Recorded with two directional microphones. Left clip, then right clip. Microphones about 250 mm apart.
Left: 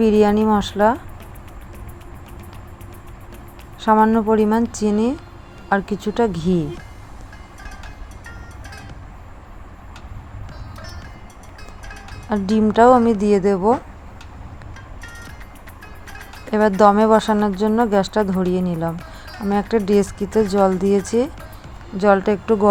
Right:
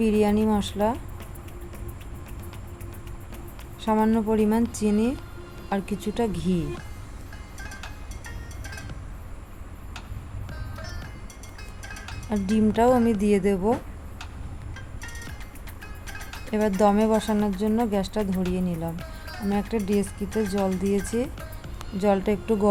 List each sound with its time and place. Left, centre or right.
0.0 s a woman's voice: centre
3.8 s a woman's voice: centre
11.9 s music: centre
12.3 s speech: centre
15.0 s music: centre
16.5 s a woman's voice: centre
18.9 s music: centre
19.5 s a woman's voice: centre